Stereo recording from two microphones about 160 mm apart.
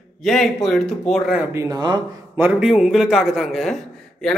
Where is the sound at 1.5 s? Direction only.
25° right (ahead or behind).